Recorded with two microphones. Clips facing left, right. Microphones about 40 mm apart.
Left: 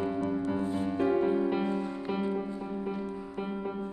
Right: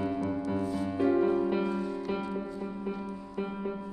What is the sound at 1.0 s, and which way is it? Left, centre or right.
Music, centre.